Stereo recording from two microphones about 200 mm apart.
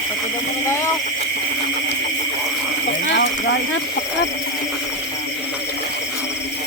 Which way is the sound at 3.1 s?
60° left (ahead or behind).